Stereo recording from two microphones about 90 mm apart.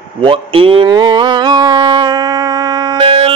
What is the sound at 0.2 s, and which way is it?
Speech, 75° right (ahead or behind).